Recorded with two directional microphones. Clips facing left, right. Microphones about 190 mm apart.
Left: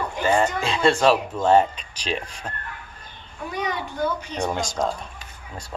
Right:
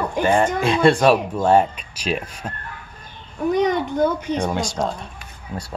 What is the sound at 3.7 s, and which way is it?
Speech, 50° right (ahead or behind).